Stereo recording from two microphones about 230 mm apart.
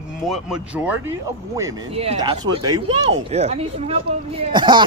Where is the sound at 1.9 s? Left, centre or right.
Right.